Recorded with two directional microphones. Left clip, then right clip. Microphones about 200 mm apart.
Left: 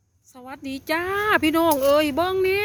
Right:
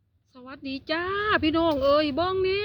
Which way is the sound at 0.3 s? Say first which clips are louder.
Left 2 dB; 5° left (ahead or behind).